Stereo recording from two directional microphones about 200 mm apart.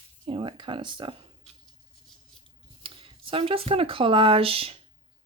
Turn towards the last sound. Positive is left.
turn(degrees=-30)  # may be behind; listen again after turning